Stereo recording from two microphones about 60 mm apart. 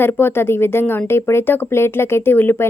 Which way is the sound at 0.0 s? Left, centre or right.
Left.